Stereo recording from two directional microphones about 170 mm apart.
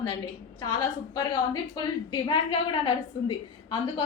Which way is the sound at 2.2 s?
30° left (ahead or behind).